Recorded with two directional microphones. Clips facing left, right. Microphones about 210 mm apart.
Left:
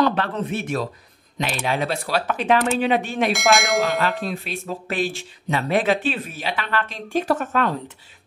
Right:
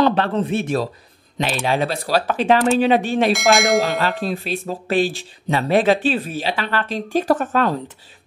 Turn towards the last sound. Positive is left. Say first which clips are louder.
# right 3 dB
turn(degrees=-35)  # may be behind; listen again after turning